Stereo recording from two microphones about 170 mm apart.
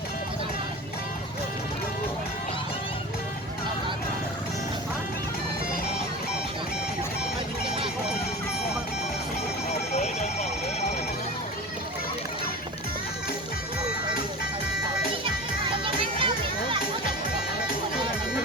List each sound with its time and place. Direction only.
9.9 s alarm: 40° left (ahead or behind)
15.2 s music: 30° right (ahead or behind)